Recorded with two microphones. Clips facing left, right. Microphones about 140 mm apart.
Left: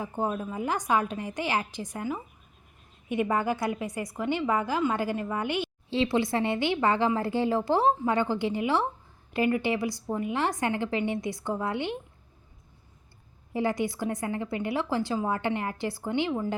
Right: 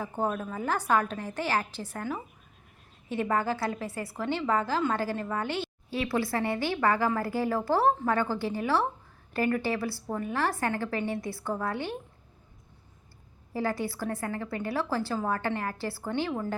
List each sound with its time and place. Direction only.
0.2 s a woman's voice: 10° left (ahead or behind)
13.5 s a woman's voice: 20° left (ahead or behind)